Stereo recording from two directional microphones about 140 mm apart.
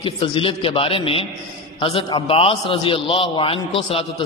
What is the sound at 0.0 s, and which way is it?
A man's voice, 40° left (ahead or behind).